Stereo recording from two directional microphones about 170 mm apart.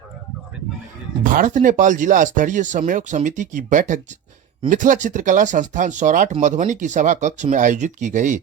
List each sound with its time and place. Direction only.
1.2 s speech: 50° right (ahead or behind)